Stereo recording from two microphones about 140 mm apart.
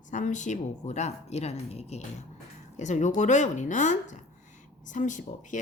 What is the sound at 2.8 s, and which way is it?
Speech, 60° left (ahead or behind).